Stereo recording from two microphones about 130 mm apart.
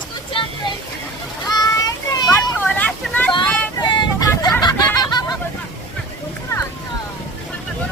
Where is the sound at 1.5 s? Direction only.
30° left (ahead or behind).